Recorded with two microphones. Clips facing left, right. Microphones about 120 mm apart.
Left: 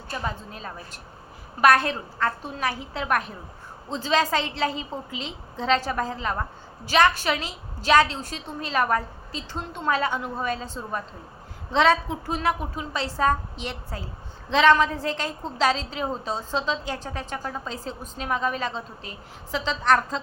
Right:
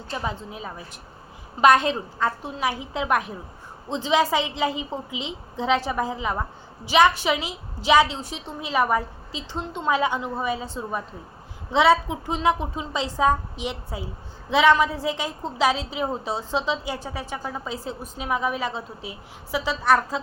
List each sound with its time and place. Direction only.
0.2 s a woman's voice: 15° right (ahead or behind)